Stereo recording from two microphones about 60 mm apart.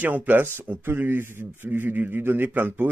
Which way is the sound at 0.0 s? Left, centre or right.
Right.